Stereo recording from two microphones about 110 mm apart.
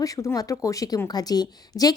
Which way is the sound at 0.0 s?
30° left (ahead or behind).